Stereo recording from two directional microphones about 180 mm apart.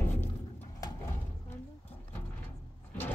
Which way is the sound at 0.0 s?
10° left (ahead or behind).